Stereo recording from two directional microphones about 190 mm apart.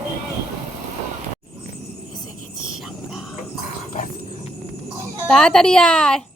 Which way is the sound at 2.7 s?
Centre (ahead or behind).